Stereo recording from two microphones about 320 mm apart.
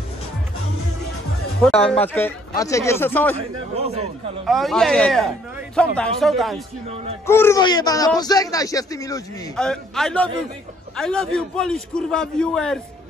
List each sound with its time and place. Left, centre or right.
1.6 s speech: centre
3.7 s a man's voice: centre
4.5 s a man's voice: centre